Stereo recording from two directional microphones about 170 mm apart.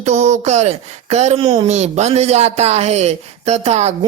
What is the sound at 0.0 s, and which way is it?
A man's voice, 45° right (ahead or behind).